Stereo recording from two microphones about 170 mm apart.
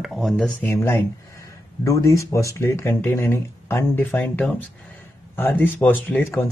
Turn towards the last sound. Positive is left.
turn(degrees=10)  # may be behind; listen again after turning